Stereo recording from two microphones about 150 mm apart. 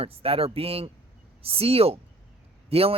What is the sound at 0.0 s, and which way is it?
Speech, 40° right (ahead or behind).